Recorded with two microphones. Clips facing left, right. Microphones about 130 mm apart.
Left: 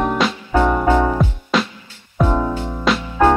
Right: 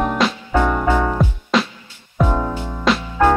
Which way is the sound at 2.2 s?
15° left (ahead or behind).